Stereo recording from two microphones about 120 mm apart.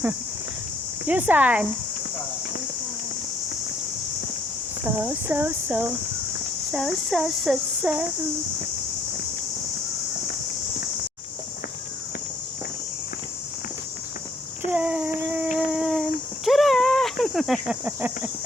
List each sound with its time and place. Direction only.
1.0 s speech: 15° right (ahead or behind)
4.8 s speech: 15° right (ahead or behind)
6.7 s a sound: centre (ahead or behind)
14.7 s speech: 10° right (ahead or behind)
15.7 s a sound: 5° right (ahead or behind)
16.5 s speech: centre (ahead or behind)
17.8 s speech: 15° right (ahead or behind)